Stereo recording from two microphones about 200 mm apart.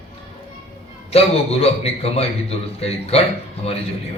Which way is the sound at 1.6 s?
30° left (ahead or behind).